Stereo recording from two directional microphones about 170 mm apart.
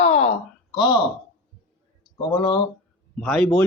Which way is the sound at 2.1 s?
30° left (ahead or behind).